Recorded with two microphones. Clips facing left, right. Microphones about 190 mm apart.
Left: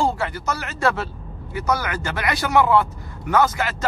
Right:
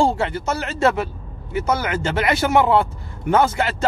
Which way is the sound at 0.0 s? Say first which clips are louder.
Right 3 dB; 25° right (ahead or behind).